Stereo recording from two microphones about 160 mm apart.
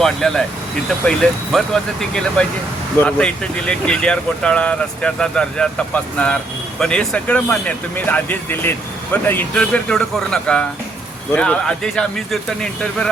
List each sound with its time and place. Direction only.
0.0 s speech: 5° left (ahead or behind)